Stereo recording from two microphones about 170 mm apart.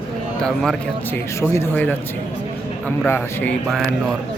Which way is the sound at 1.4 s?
15° left (ahead or behind).